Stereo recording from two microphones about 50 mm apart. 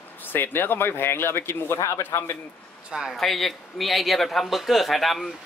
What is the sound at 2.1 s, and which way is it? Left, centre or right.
Speech, left.